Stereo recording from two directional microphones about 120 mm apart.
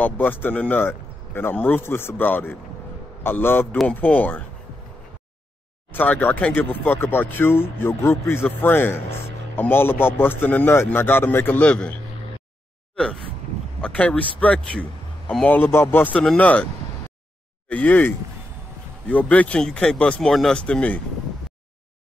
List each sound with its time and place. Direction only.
0.0 s speech: 15° left (ahead or behind)
5.9 s speech: 15° left (ahead or behind)
17.6 s speech: 15° left (ahead or behind)